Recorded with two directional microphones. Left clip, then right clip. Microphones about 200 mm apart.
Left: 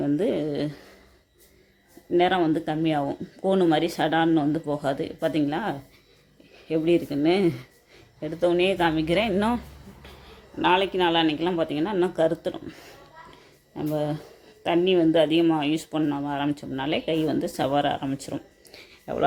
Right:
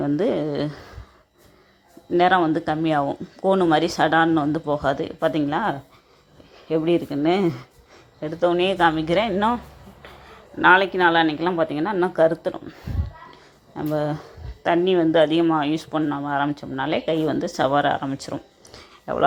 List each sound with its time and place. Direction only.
0.0 s speech: centre (ahead or behind)
2.0 s speech: centre (ahead or behind)
10.6 s speech: 5° right (ahead or behind)